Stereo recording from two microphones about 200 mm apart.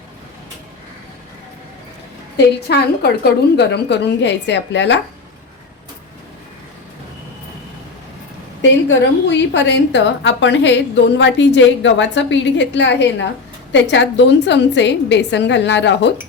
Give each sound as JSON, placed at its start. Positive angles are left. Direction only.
{"t": 2.6, "sound": "a woman's voice", "side_deg": 55}
{"t": 8.9, "sound": "a woman's voice", "side_deg": 65}